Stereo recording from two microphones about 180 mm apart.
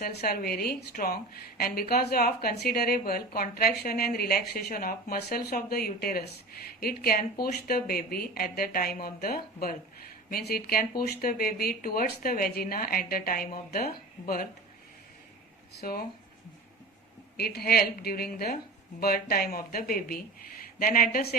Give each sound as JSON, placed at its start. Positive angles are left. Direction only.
{"t": 0.0, "sound": "a woman's voice", "side_deg": 60}
{"t": 15.8, "sound": "a woman's voice", "side_deg": 60}
{"t": 17.3, "sound": "a woman's voice", "side_deg": 60}